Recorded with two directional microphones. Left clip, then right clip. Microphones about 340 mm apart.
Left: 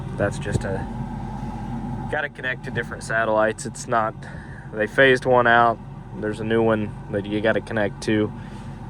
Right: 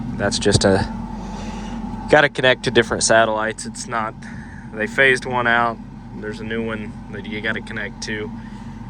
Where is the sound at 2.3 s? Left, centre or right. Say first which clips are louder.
Right 12 dB; centre.